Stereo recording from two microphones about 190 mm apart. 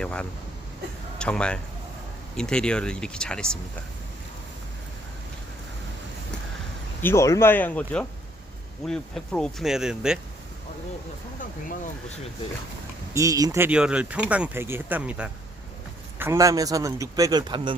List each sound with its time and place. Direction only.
0.0 s speech: 5° left (ahead or behind)
7.0 s speech: 15° left (ahead or behind); by 10.2 s 5° right (ahead or behind)
13.1 s speech: 20° right (ahead or behind)